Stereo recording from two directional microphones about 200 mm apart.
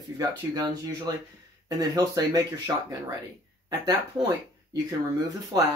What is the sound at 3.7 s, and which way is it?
Speech, 20° right (ahead or behind).